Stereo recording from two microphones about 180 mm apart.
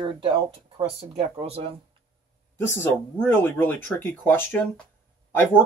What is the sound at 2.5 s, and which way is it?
Speech, 10° left (ahead or behind).